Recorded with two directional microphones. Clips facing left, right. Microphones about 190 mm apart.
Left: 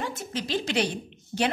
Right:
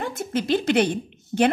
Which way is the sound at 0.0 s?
55° right (ahead or behind).